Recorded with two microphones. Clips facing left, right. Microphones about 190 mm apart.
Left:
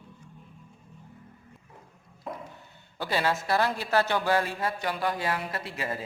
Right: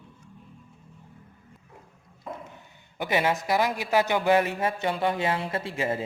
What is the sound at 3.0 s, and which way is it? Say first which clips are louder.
A woman's voice: right 3 dB; 20° right (ahead or behind).